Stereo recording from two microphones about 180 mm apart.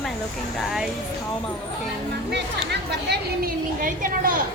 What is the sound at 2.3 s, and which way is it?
A woman's voice, 70° right (ahead or behind).